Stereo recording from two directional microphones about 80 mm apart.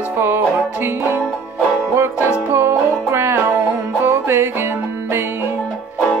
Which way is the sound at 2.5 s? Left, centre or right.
Right.